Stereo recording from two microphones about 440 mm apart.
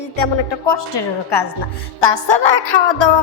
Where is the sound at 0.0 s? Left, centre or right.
Left.